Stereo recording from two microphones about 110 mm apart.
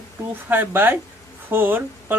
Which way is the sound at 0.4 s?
15° right (ahead or behind).